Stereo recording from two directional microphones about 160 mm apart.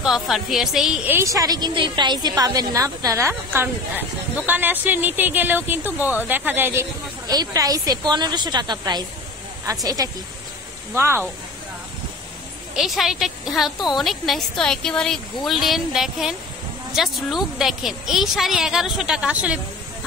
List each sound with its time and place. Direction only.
0.0 s a woman's voice: centre (ahead or behind)
12.7 s a woman's voice: centre (ahead or behind)